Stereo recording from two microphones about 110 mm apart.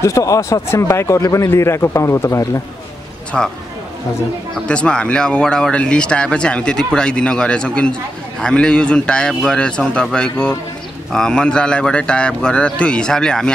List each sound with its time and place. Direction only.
0.0 s speech: 30° left (ahead or behind)
3.3 s speech: 15° left (ahead or behind)
4.6 s speech: 10° left (ahead or behind)